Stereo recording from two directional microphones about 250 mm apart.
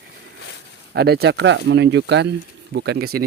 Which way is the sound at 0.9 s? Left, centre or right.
Right.